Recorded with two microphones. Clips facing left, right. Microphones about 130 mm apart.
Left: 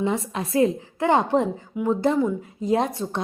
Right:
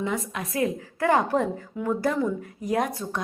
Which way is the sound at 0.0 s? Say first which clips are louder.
Left 4 dB; 30° left (ahead or behind).